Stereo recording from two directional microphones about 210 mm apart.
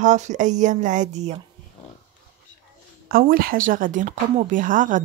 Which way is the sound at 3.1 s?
45° right (ahead or behind).